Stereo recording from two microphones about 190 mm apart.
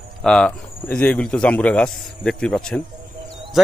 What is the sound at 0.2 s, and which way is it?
A man's voice, 5° left (ahead or behind).